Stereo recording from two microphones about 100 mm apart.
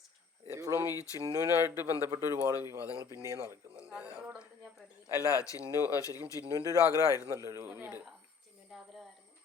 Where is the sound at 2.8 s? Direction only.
35° left (ahead or behind).